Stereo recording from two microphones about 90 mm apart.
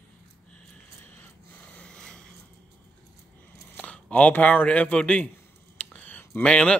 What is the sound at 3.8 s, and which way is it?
Speech, 15° left (ahead or behind).